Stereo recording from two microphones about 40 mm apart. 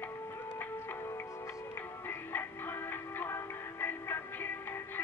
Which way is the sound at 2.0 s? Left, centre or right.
Left.